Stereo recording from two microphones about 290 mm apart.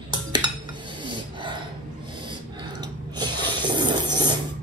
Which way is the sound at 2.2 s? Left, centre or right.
Centre.